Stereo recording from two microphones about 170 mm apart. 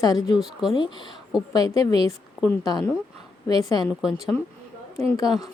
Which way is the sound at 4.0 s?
Centre (ahead or behind).